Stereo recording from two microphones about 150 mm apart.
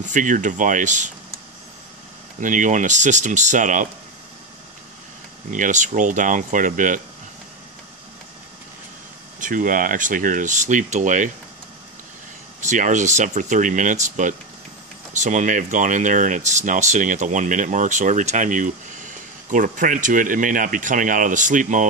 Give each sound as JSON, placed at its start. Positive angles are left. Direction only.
{"t": 0.0, "sound": "speech", "side_deg": -60}
{"t": 2.4, "sound": "speech", "side_deg": -60}
{"t": 5.5, "sound": "speech", "side_deg": -55}
{"t": 9.4, "sound": "speech", "side_deg": -65}
{"t": 12.5, "sound": "speech", "side_deg": -55}